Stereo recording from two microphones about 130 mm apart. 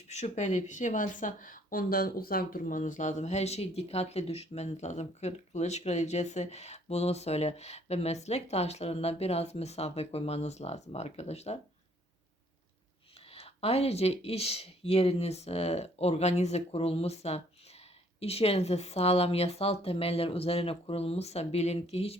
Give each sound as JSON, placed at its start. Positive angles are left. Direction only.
{"t": 0.1, "sound": "speech", "side_deg": 60}
{"t": 13.3, "sound": "speech", "side_deg": 50}